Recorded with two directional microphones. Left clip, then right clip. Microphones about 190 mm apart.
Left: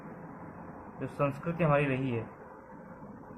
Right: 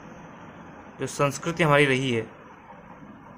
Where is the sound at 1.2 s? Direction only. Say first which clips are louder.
Right 7 dB; 65° right (ahead or behind).